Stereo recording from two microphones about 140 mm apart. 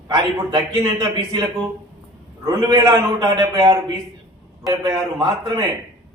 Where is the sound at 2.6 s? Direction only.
25° right (ahead or behind).